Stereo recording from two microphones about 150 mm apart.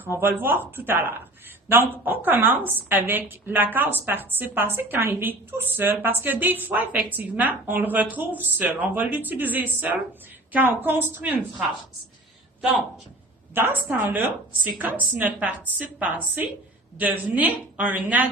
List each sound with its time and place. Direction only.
0.0 s a woman's voice: 15° right (ahead or behind)
13.5 s a woman's voice: 15° right (ahead or behind)